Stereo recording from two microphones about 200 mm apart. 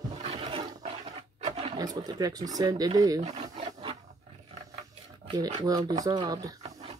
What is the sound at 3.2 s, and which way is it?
Speech, 35° right (ahead or behind).